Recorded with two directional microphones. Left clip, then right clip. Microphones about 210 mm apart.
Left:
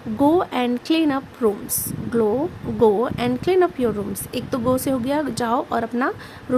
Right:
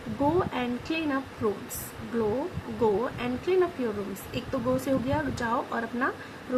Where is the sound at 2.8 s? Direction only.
55° left (ahead or behind).